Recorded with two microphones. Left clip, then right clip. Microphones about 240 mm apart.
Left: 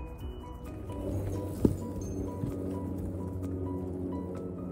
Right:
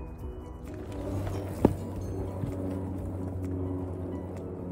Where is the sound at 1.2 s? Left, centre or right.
Centre.